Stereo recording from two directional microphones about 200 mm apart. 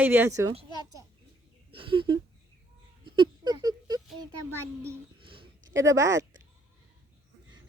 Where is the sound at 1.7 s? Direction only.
25° right (ahead or behind).